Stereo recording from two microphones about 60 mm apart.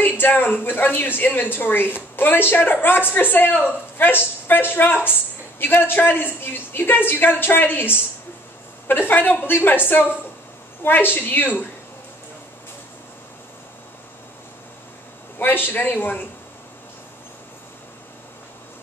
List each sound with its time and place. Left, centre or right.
0.0 s a woman's voice: left
10.8 s a woman's voice: left
15.3 s a woman's voice: left